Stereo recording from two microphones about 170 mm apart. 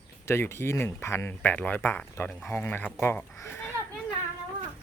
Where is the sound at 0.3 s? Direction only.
15° left (ahead or behind).